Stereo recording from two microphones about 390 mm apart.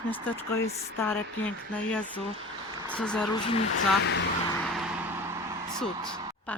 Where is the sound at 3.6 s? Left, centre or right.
Left.